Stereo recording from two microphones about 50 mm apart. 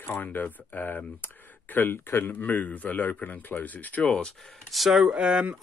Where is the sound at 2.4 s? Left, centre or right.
Left.